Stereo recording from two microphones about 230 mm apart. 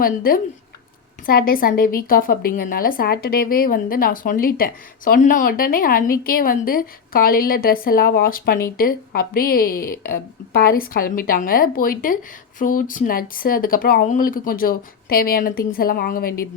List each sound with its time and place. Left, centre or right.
0.0 s a woman's voice: left